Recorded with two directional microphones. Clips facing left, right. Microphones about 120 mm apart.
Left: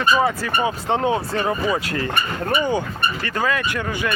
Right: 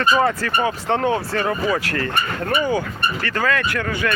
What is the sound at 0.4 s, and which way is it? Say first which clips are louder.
Speech: right 1 dB; 15° left (ahead or behind).